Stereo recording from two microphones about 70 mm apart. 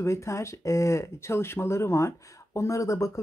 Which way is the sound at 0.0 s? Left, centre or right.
Left.